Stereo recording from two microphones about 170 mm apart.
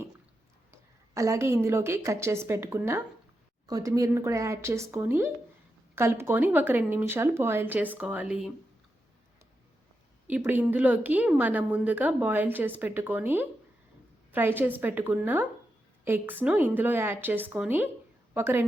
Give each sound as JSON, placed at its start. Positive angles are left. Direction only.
{"t": 0.7, "sound": "a woman's voice", "side_deg": -20}
{"t": 10.2, "sound": "a woman's voice", "side_deg": -10}